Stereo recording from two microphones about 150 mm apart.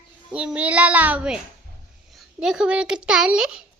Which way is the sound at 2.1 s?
5° right (ahead or behind).